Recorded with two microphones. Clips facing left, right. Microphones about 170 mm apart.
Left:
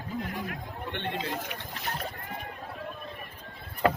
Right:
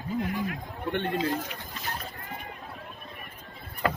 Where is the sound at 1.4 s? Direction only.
65° left (ahead or behind).